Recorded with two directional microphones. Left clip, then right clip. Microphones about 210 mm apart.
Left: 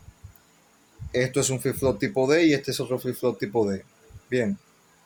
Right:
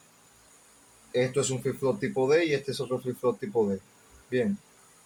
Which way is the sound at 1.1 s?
60° left (ahead or behind).